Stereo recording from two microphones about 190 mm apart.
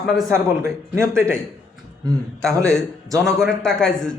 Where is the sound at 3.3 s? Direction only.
Centre (ahead or behind).